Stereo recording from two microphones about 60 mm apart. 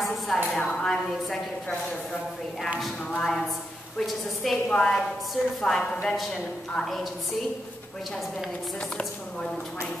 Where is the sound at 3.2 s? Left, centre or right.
Centre.